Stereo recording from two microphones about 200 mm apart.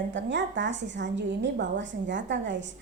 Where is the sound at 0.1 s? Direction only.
60° right (ahead or behind).